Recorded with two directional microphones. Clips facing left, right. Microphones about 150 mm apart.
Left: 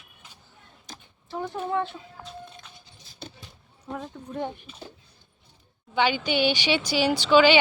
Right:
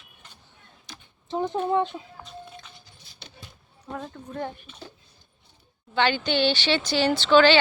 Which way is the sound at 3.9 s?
10° left (ahead or behind).